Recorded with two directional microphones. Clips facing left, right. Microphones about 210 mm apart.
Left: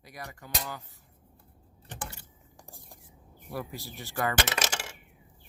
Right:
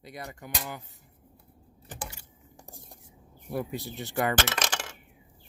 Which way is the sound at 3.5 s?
20° right (ahead or behind).